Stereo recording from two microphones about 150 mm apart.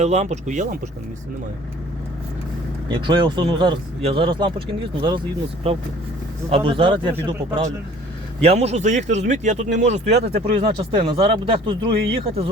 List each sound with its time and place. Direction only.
0.0 s speech: 45° right (ahead or behind)
2.9 s speech: 30° right (ahead or behind)
8.4 s speech: 45° right (ahead or behind)